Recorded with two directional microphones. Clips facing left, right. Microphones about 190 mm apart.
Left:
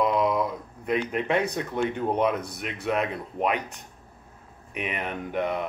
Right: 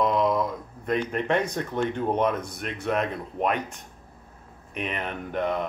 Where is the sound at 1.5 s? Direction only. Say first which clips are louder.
Even; 10° left (ahead or behind).